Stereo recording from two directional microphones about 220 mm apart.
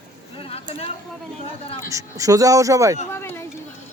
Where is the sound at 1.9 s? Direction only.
15° right (ahead or behind).